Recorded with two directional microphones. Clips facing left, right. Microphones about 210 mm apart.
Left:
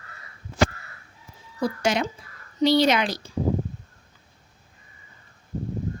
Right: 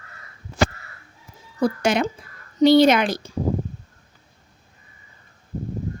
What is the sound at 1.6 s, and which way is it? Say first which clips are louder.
A woman's voice: right 4 dB; 55° right (ahead or behind).